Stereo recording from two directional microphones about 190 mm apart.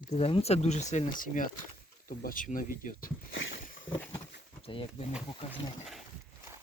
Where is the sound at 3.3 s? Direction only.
85° left.